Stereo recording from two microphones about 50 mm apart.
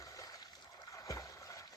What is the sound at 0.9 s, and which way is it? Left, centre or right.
Boat, left.